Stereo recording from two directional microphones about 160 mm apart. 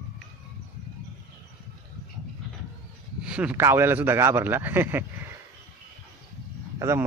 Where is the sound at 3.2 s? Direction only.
5° right (ahead or behind).